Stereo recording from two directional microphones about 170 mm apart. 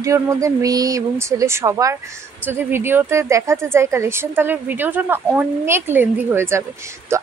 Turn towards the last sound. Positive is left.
turn(degrees=-15)  # may be behind; listen again after turning